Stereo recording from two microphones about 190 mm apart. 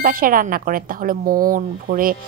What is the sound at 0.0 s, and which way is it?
A woman's voice, 45° right (ahead or behind).